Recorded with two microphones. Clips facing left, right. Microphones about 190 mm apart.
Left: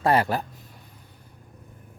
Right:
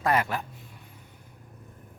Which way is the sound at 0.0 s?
30° left (ahead or behind).